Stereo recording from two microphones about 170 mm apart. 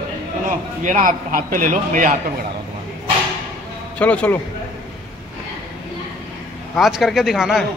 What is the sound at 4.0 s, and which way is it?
Speech, 10° left (ahead or behind).